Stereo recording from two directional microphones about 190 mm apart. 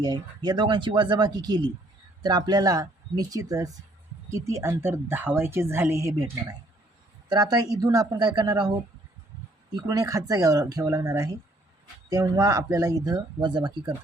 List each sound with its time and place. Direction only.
0.0 s a woman's voice: 20° right (ahead or behind)
7.3 s speech: 20° right (ahead or behind)